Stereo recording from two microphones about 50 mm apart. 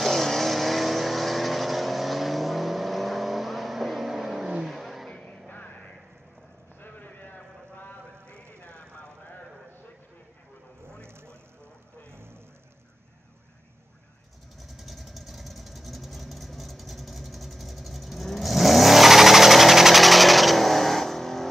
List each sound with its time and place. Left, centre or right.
0.0 s vehicle: centre
5.5 s vehicle: left
6.8 s clip-clop: left
10.9 s vehicle: right
14.8 s vehicle: centre